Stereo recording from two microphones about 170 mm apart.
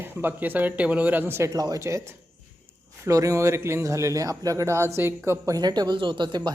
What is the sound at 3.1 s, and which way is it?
A man's voice, 20° right (ahead or behind).